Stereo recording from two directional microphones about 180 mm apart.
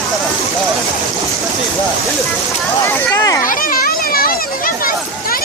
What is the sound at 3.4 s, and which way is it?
Children playing, 50° left (ahead or behind).